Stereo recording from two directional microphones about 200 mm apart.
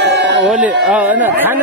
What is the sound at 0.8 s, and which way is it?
Speech, 5° right (ahead or behind).